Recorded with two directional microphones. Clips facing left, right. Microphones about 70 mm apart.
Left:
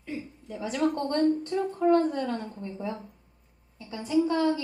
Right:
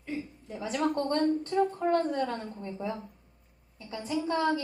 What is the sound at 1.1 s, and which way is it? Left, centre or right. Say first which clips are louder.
A woman's voice: left 1 dB; right.